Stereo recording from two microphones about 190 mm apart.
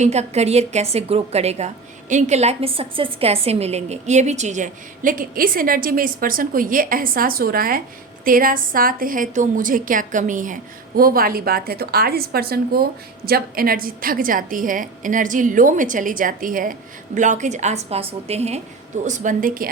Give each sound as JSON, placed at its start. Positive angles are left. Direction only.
{"t": 0.0, "sound": "a woman's voice", "side_deg": -35}